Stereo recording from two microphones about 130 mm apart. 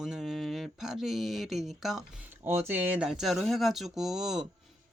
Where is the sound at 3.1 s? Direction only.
Centre (ahead or behind).